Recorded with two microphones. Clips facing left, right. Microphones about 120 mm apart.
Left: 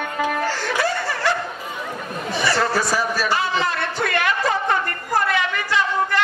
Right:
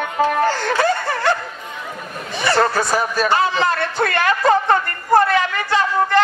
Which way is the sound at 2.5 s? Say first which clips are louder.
Right 4 dB; 55° right (ahead or behind).